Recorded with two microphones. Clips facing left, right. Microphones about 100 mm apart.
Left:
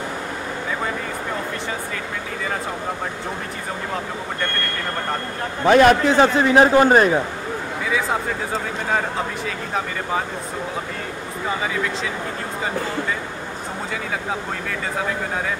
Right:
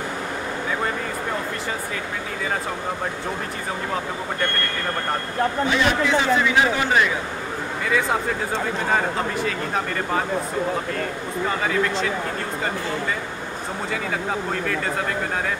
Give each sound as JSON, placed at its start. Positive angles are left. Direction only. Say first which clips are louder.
{"t": 5.7, "sound": "a man's voice", "louder": "left 12 dB", "side_deg": 50}
{"t": 8.9, "sound": "speech", "louder": "even", "side_deg": 0}